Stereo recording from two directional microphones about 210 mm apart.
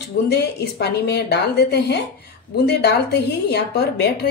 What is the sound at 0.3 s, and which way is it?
A woman's voice, 50° left (ahead or behind).